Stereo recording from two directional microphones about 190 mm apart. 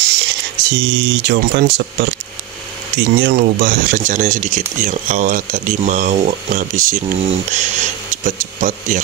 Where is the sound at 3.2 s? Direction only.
60° right (ahead or behind).